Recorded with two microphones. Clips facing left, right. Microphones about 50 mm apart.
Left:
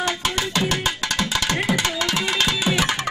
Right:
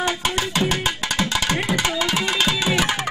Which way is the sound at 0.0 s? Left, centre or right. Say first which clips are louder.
Right 1 dB; centre.